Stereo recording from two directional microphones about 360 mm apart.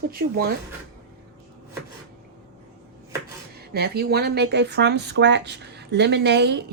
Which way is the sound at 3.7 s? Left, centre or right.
Right.